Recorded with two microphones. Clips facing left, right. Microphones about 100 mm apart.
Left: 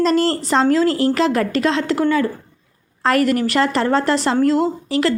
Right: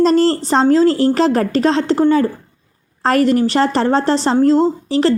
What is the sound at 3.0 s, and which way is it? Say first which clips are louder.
A woman's voice: right 3 dB; 30° right (ahead or behind).